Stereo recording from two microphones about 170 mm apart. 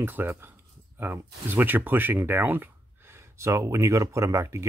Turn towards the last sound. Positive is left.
turn(degrees=-15)  # may be behind; listen again after turning